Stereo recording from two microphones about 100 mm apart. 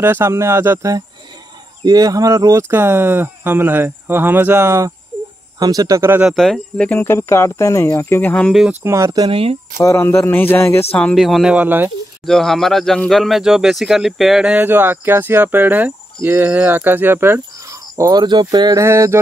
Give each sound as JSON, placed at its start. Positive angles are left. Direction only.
{"t": 0.0, "sound": "speech", "side_deg": -25}
{"t": 1.9, "sound": "speech", "side_deg": -40}
{"t": 2.7, "sound": "speech", "side_deg": -25}
{"t": 5.6, "sound": "speech", "side_deg": -40}
{"t": 6.2, "sound": "speech", "side_deg": 0}
{"t": 6.9, "sound": "speech", "side_deg": 20}
{"t": 8.8, "sound": "speech", "side_deg": -30}
{"t": 9.3, "sound": "speech", "side_deg": -70}
{"t": 9.8, "sound": "speech", "side_deg": 25}
{"t": 11.1, "sound": "speech", "side_deg": 0}
{"t": 11.5, "sound": "speech", "side_deg": -20}
{"t": 12.3, "sound": "speech", "side_deg": 5}
{"t": 18.2, "sound": "speech", "side_deg": -50}
{"t": 18.8, "sound": "speech", "side_deg": -30}